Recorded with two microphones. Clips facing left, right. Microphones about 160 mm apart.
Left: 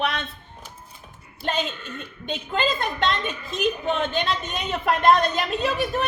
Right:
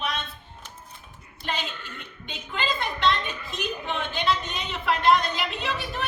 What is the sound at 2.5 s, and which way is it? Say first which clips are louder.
Speech: left 4 dB; 45° left (ahead or behind).